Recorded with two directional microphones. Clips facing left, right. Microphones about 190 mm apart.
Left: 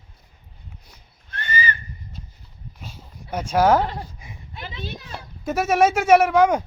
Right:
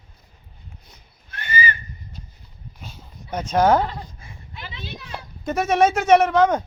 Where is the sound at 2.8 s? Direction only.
5° left (ahead or behind).